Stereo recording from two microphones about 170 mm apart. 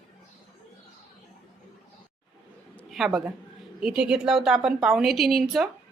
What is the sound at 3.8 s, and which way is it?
A woman's voice, 5° right (ahead or behind).